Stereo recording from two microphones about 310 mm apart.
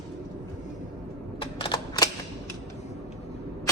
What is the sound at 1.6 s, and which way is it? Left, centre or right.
Typewriter, centre.